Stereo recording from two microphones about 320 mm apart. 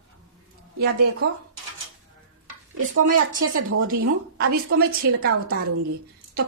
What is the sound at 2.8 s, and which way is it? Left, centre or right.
Speech, right.